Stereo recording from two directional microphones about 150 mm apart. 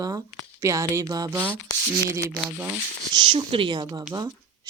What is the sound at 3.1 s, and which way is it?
Speech, 30° right (ahead or behind).